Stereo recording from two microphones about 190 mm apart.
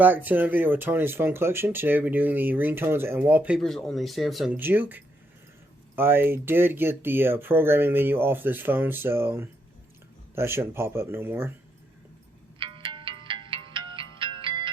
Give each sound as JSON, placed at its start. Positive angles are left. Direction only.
{"t": 0.0, "sound": "speech", "side_deg": -10}
{"t": 12.5, "sound": "music", "side_deg": -25}